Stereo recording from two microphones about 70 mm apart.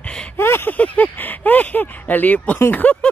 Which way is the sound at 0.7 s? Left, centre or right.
Left.